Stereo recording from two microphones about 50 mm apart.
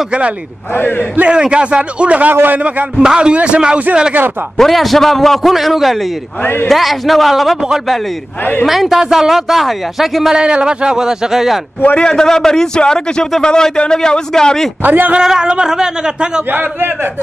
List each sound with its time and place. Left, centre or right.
0.7 s speech: left
1.3 s a man's voice: centre
3.0 s a man's voice: centre
4.6 s speech: centre
6.4 s speech: left
6.7 s speech: centre
8.6 s speech: centre
10.3 s speech: centre
12.0 s a man's voice: centre
14.8 s a man's voice: right
15.2 s speech: centre